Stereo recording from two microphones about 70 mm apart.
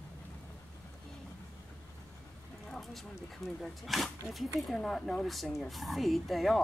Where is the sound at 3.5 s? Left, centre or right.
Centre.